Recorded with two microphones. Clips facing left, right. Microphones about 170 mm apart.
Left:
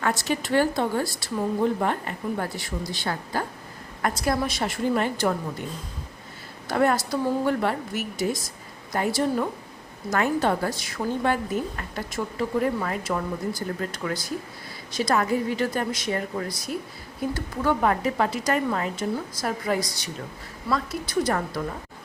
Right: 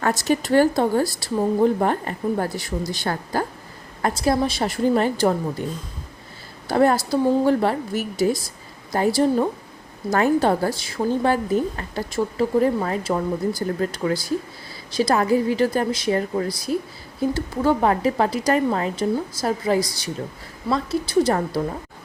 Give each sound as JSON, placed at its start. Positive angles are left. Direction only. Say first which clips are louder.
{"t": 0.0, "sound": "a woman's voice", "louder": "right 5 dB", "side_deg": -40}
{"t": 4.0, "sound": "a woman's voice", "louder": "right 4 dB", "side_deg": -30}
{"t": 6.7, "sound": "a woman's voice", "louder": "right 4 dB", "side_deg": -30}